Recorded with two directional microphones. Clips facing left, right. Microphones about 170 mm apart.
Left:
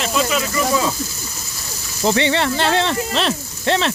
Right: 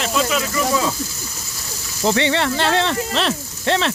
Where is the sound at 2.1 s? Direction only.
20° left (ahead or behind).